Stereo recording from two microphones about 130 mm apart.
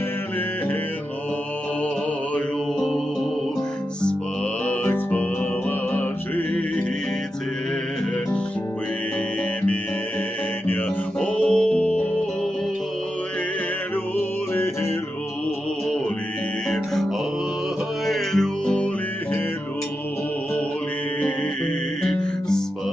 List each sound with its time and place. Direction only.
2.3 s music: 5° left (ahead or behind)
4.6 s music: 15° left (ahead or behind)
10.7 s music: 10° left (ahead or behind)
14.1 s music: 15° left (ahead or behind)
16.7 s music: 5° left (ahead or behind)
22.0 s music: 5° left (ahead or behind)